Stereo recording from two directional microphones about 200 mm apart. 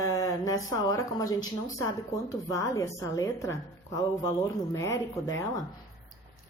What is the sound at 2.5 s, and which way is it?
Speech, 15° left (ahead or behind).